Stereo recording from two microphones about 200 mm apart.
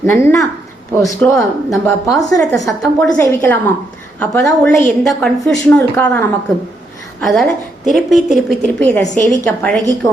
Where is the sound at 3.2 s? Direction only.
10° left (ahead or behind).